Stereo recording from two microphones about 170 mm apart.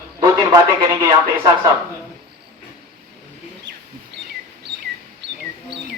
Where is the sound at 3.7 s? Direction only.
90° right.